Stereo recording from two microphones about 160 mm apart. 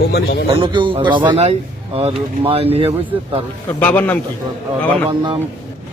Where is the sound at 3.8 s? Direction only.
10° left (ahead or behind).